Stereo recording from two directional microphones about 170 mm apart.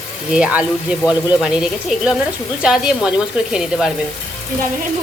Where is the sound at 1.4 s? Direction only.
5° right (ahead or behind).